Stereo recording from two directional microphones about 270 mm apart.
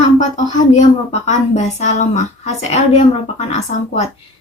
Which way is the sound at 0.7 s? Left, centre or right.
Left.